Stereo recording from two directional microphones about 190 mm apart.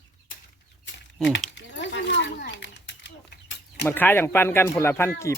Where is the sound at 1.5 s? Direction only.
70° left (ahead or behind).